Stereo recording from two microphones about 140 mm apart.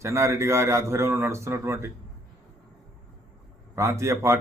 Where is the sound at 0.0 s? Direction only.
20° right (ahead or behind).